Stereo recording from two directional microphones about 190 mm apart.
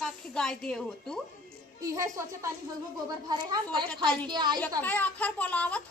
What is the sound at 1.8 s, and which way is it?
Speech, 15° right (ahead or behind).